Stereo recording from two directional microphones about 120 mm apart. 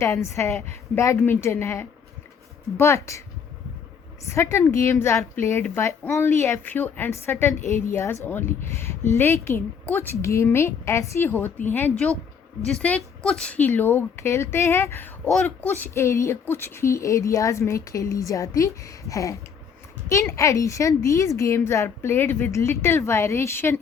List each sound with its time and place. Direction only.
0.0 s a woman's voice: 25° left (ahead or behind)